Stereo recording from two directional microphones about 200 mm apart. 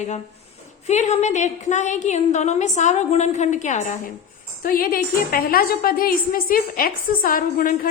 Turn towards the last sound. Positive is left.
turn(degrees=45)  # may be behind; listen again after turning